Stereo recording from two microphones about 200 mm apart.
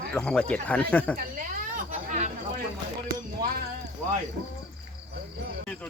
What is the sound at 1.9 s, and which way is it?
Chatter, 35° right (ahead or behind).